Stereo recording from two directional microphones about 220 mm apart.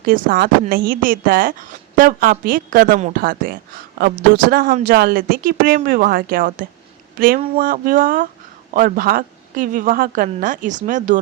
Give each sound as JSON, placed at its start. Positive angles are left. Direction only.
{"t": 0.0, "sound": "speech", "side_deg": -40}